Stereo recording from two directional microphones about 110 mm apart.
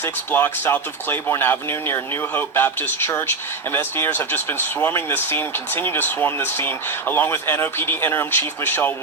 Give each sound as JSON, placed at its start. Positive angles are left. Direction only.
{"t": 0.0, "sound": "speech", "side_deg": 15}